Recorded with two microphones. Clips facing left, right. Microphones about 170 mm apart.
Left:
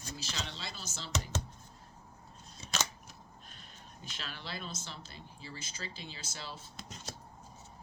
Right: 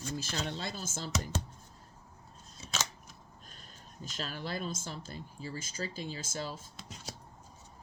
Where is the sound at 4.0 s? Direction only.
45° right (ahead or behind).